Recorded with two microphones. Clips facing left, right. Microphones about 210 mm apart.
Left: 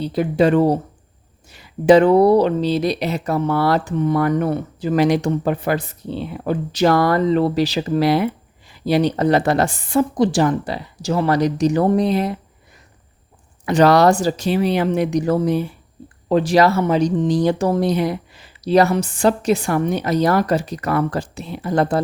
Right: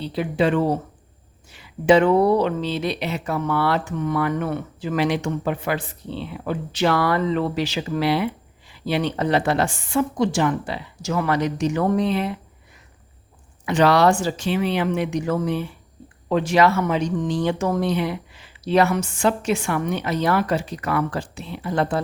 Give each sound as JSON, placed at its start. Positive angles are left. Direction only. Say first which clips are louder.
{"t": 0.0, "sound": "speech", "louder": "left 5 dB", "side_deg": 45}
{"t": 13.7, "sound": "speech", "louder": "left 4 dB", "side_deg": 40}